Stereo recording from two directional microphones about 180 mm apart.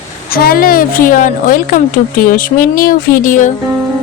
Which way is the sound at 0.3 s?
55° left (ahead or behind).